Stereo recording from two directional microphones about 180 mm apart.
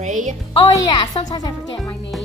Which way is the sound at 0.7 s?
20° left (ahead or behind).